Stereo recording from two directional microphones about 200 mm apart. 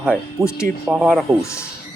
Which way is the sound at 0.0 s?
5° right (ahead or behind).